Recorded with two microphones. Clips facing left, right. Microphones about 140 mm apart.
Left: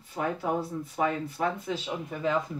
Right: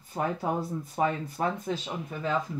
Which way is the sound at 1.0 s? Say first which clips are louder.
Even; 40° right (ahead or behind).